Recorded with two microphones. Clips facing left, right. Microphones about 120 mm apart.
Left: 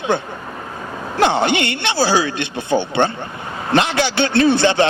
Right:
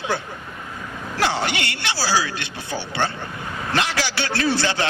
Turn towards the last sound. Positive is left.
turn(degrees=20)  # may be behind; listen again after turning